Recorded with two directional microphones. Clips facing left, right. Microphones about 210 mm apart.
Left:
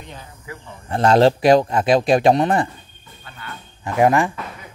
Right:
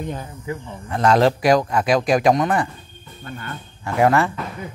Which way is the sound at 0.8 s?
30° left (ahead or behind).